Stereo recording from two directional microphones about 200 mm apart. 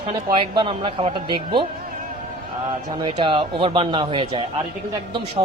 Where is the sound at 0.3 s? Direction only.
25° right (ahead or behind).